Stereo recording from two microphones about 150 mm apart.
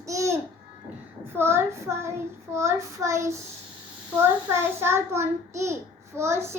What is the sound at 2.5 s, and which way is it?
Child singing, 20° right (ahead or behind).